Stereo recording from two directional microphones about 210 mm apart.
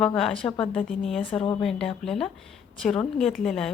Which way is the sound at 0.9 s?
Centre (ahead or behind).